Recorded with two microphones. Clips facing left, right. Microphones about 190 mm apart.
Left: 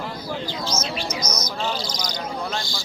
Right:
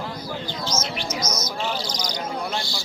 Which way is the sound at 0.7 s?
15° left (ahead or behind).